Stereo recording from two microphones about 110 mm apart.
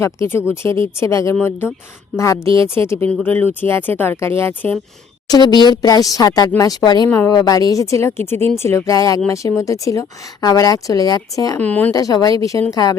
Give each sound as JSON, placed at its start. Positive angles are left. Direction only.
{"t": 0.0, "sound": "a woman's voice", "side_deg": 25}
{"t": 5.3, "sound": "a woman's voice", "side_deg": 40}
{"t": 11.6, "sound": "speech", "side_deg": 15}
{"t": 11.9, "sound": "speech", "side_deg": 35}